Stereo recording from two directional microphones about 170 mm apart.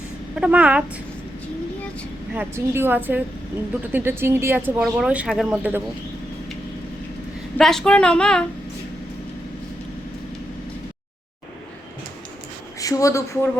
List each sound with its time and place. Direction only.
0.3 s speech: 10° right (ahead or behind)
2.3 s speech: 10° right (ahead or behind)
7.6 s speech: 5° left (ahead or behind)
12.8 s speech: 20° left (ahead or behind)